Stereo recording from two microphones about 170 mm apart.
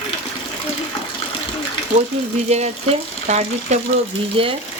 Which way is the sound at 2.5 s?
40° right (ahead or behind).